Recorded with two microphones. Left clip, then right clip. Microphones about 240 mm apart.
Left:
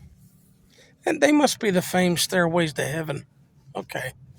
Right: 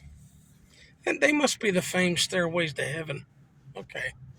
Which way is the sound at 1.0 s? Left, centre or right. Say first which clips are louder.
Left 5 dB; centre.